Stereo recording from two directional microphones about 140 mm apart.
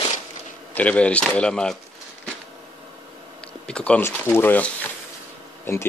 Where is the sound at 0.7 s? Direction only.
10° left (ahead or behind).